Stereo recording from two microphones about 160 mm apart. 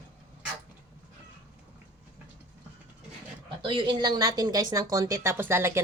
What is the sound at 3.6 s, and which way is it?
Speech, 30° right (ahead or behind).